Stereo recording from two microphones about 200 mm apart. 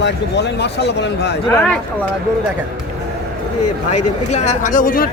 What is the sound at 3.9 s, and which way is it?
Speech, 35° left (ahead or behind).